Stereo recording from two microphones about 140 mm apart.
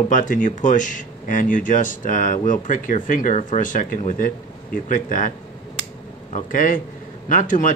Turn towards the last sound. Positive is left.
turn(degrees=70)  # may be behind; listen again after turning